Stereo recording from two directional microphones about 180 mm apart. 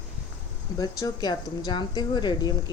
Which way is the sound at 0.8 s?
20° left (ahead or behind).